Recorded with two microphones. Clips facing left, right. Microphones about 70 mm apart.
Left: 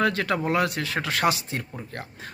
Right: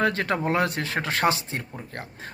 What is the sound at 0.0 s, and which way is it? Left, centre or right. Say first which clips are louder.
Speech: even; right.